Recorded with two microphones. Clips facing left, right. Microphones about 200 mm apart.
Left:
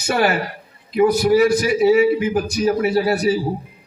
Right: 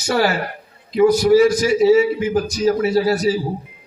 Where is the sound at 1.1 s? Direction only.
60° left (ahead or behind).